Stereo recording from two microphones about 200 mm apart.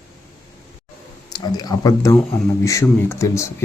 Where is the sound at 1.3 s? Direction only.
20° left (ahead or behind).